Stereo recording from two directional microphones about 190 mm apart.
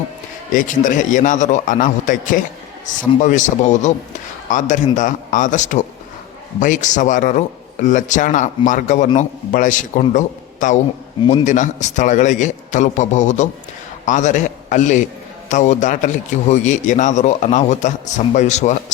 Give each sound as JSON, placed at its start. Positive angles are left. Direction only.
{"t": 0.5, "sound": "a man's voice", "side_deg": 40}